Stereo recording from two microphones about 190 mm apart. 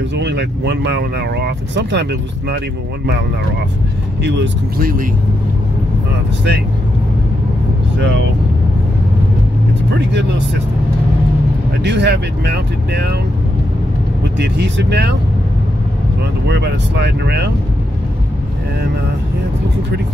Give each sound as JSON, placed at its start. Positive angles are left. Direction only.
{"t": 0.1, "sound": "speech", "side_deg": -65}
{"t": 4.7, "sound": "speech", "side_deg": -50}
{"t": 11.8, "sound": "speech", "side_deg": -65}
{"t": 14.4, "sound": "speech", "side_deg": -65}
{"t": 16.4, "sound": "speech", "side_deg": -60}